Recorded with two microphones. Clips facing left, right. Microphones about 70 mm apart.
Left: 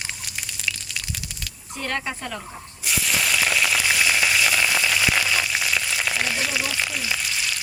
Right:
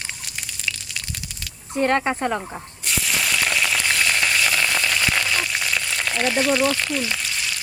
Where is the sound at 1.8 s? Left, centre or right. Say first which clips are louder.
Right 9 dB; right.